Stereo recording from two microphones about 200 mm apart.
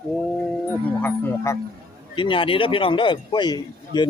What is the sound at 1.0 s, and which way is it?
Livestock, 10° left (ahead or behind).